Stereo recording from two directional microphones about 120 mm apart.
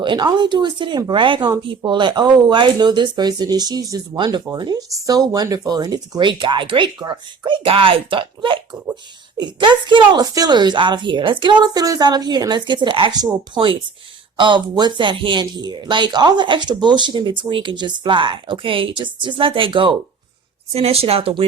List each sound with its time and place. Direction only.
0.0 s a woman's voice: 40° right (ahead or behind)
14.3 s a woman's voice: 40° right (ahead or behind)
20.7 s speech: 55° right (ahead or behind)